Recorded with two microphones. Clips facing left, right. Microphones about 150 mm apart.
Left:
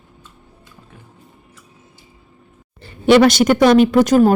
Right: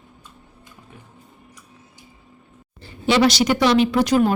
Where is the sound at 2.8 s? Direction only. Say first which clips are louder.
Left 6 dB; 60° left (ahead or behind).